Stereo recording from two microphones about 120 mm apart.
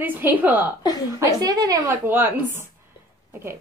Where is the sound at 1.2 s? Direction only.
30° right (ahead or behind).